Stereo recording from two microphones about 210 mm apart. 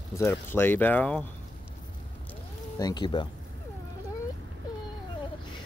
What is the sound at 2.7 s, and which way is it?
Speech, 20° left (ahead or behind).